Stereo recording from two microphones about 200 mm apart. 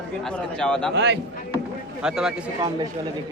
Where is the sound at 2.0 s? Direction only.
5° right (ahead or behind).